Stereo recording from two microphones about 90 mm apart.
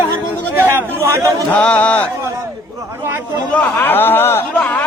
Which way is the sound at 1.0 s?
35° right (ahead or behind).